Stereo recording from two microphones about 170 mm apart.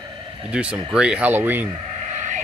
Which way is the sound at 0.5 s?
5° right (ahead or behind).